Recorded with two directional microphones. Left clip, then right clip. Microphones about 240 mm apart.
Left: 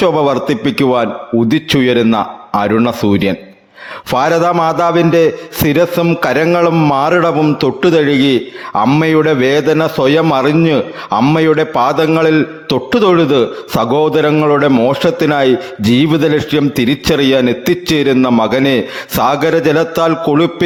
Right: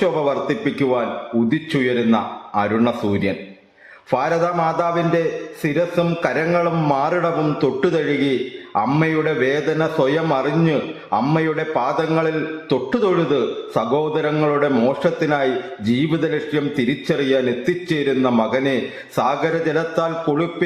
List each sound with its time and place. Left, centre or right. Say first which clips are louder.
0.0 s a man's voice: left 7 dB; left